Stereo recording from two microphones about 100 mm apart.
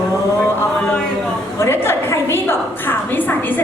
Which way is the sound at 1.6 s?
25° left (ahead or behind).